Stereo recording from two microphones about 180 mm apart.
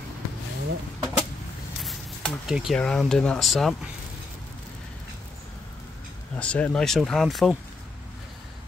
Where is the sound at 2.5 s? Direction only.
Centre (ahead or behind).